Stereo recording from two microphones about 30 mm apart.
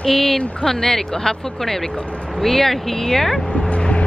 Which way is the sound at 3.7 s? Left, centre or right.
Left.